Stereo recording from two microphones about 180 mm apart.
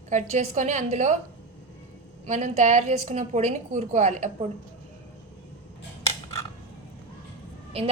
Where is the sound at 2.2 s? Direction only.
40° right (ahead or behind).